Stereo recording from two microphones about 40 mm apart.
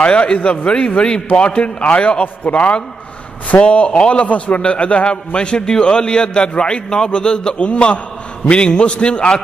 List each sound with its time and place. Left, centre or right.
0.0 s a man's voice: left